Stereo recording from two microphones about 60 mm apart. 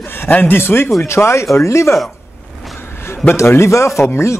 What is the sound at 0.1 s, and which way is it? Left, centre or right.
Speech, left.